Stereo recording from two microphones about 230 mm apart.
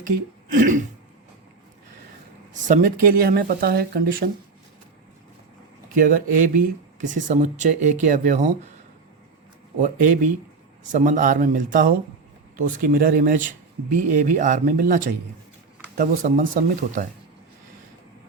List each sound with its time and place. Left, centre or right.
0.5 s speech: right
2.5 s speech: right
6.0 s speech: right
9.8 s speech: right